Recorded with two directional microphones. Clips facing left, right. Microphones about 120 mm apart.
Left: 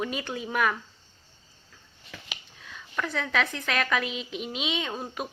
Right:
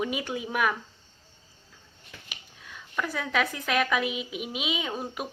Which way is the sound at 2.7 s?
5° right (ahead or behind).